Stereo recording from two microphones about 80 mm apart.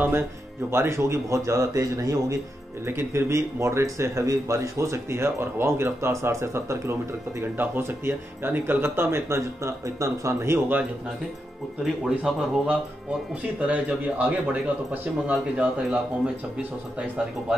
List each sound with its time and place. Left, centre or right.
0.7 s speech: right
2.9 s speech: right
11.8 s speech: centre